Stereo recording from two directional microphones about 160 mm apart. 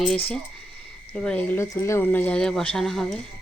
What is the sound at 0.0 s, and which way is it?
Speech, 5° left (ahead or behind).